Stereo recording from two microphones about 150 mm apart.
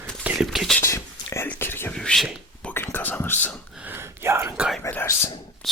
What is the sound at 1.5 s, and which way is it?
Speech, 15° left (ahead or behind).